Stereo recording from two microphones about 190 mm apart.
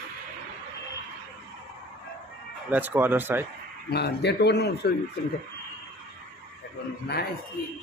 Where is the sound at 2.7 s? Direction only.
10° right (ahead or behind).